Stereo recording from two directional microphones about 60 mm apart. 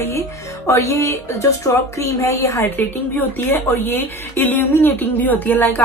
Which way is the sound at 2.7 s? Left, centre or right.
Left.